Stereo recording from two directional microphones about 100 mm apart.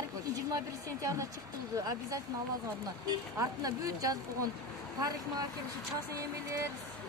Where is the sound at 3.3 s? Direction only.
35° right (ahead or behind).